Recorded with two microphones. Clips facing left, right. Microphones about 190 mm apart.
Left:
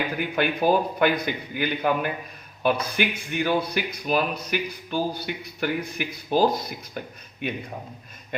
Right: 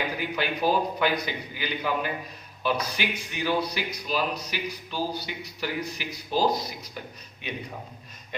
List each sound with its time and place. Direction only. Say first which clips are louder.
0.2 s speech: left 4 dB; 55° left (ahead or behind)